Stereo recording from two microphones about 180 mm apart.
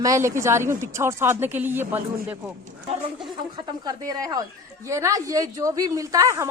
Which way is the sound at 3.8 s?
20° right (ahead or behind).